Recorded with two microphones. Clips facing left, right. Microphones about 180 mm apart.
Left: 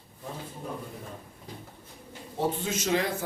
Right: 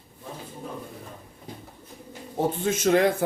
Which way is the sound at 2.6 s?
50° right (ahead or behind).